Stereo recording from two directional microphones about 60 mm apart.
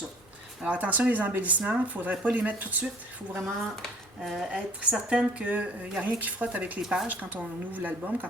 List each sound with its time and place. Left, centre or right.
0.6 s speech: right
4.2 s speech: centre
4.8 s speech: centre
6.8 s speech: centre
7.1 s speech: right